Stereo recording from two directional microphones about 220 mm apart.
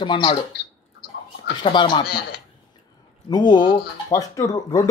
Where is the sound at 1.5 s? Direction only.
20° left (ahead or behind).